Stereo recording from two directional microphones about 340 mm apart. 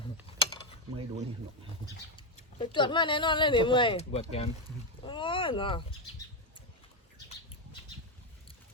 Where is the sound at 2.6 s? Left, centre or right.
Centre.